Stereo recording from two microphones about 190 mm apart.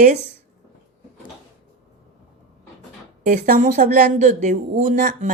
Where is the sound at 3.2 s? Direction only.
45° right (ahead or behind).